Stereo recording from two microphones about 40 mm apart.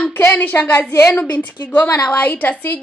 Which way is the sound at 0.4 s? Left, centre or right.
Left.